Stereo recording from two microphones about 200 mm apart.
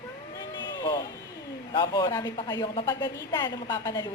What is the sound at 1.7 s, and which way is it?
A woman's voice, 20° left (ahead or behind).